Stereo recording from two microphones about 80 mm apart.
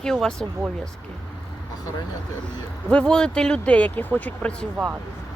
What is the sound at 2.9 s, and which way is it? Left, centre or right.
Speech, centre.